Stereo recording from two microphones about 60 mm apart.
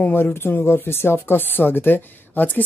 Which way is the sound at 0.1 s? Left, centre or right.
Left.